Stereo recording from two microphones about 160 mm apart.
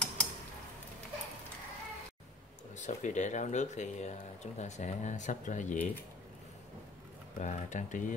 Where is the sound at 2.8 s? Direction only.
50° left (ahead or behind).